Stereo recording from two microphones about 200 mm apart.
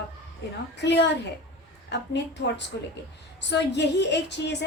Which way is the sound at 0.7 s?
60° left (ahead or behind).